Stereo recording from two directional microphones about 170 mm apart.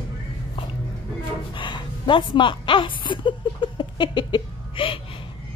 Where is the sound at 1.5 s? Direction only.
30° left (ahead or behind).